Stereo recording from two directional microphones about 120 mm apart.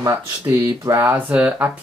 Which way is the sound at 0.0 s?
25° right (ahead or behind).